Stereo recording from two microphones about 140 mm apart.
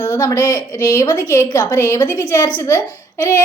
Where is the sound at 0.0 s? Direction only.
25° left (ahead or behind).